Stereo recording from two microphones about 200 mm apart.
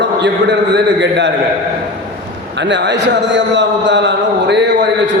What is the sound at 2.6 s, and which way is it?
Speech, 60° right (ahead or behind).